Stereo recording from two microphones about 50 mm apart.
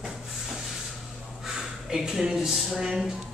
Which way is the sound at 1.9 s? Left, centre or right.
Centre.